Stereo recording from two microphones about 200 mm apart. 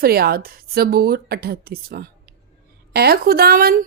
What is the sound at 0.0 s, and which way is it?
A woman's voice, 50° right (ahead or behind).